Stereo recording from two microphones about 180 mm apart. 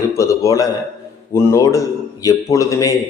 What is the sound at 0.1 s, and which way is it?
A man's voice, 15° left (ahead or behind).